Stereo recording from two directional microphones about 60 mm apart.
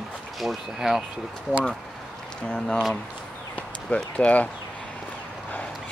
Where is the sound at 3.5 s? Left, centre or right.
Left.